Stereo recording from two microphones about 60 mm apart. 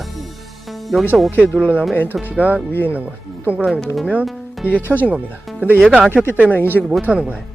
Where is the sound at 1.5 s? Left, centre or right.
Right.